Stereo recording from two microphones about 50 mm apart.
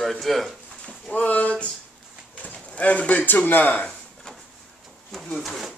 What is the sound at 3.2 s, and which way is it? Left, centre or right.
Speech, left.